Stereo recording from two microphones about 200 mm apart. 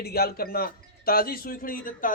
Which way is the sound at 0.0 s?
50° left (ahead or behind).